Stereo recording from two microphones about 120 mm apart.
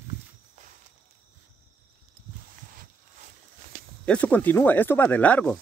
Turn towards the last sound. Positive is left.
turn(degrees=10)  # may be behind; listen again after turning